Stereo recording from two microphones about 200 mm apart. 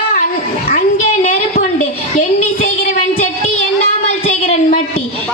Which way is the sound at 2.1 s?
35° left (ahead or behind).